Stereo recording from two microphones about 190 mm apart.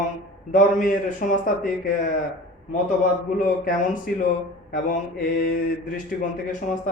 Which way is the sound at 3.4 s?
45° left (ahead or behind).